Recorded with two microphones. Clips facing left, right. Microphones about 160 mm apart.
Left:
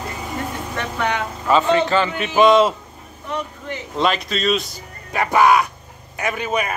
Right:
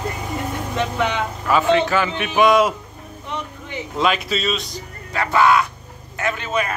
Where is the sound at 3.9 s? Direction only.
Centre (ahead or behind).